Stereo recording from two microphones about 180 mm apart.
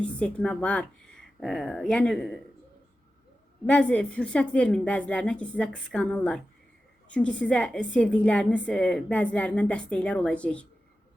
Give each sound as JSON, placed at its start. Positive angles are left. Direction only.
{"t": 0.2, "sound": "speech", "side_deg": 5}
{"t": 3.7, "sound": "a woman's voice", "side_deg": 5}